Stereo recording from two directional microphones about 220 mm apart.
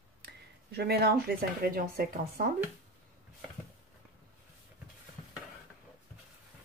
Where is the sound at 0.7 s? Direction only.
45° right (ahead or behind).